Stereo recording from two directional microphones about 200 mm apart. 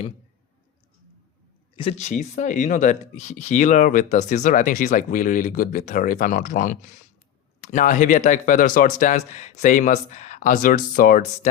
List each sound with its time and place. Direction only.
1.7 s speech: 30° left (ahead or behind)